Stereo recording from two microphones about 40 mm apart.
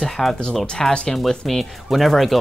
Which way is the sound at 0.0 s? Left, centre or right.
Centre.